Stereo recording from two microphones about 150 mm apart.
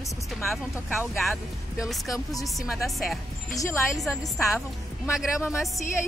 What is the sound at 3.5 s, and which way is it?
Speech, 20° left (ahead or behind).